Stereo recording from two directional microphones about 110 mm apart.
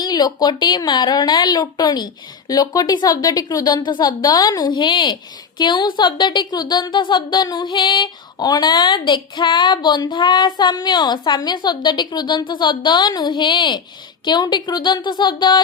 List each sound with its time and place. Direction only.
0.0 s speech: 35° left (ahead or behind)